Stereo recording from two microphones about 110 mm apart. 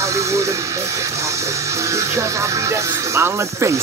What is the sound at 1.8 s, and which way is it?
Speech, 25° right (ahead or behind).